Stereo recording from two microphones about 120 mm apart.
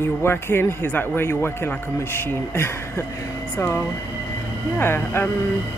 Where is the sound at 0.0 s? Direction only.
20° left (ahead or behind).